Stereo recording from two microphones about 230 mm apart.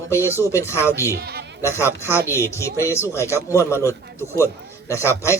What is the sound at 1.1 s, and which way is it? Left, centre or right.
Speech, right.